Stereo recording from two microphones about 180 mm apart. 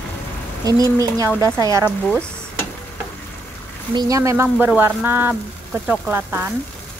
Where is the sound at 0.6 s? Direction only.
20° right (ahead or behind).